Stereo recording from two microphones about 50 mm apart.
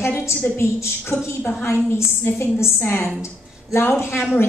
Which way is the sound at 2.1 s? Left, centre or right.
Left.